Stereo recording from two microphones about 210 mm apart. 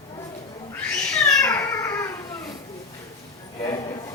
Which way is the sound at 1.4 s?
15° left (ahead or behind).